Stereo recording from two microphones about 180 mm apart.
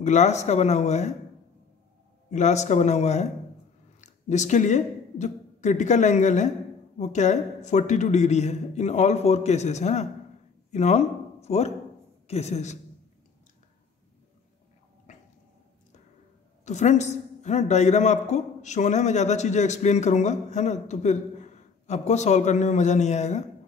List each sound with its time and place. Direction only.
0.0 s a woman's voice: 40° left (ahead or behind)
2.3 s a woman's voice: 40° left (ahead or behind)
15.1 s a sound: 40° left (ahead or behind)
16.6 s a woman's voice: 40° left (ahead or behind)